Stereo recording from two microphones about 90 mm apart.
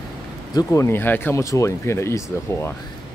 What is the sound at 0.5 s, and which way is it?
Speech, 35° left (ahead or behind).